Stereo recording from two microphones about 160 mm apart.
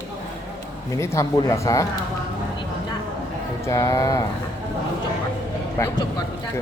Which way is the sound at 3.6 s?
20° left (ahead or behind).